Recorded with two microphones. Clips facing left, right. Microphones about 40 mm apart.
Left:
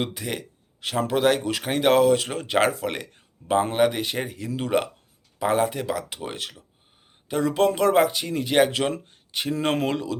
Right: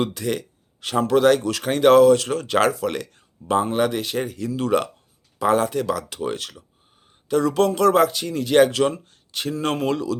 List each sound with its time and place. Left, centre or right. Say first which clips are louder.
0.0 s speech: right 5 dB; centre